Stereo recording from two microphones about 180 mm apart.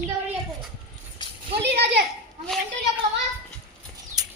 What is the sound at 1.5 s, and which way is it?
Speech, 65° right (ahead or behind).